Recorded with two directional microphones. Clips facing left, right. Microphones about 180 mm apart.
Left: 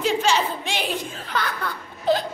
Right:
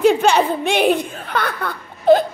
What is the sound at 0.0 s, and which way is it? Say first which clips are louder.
Speech: right 8 dB; 55° right (ahead or behind).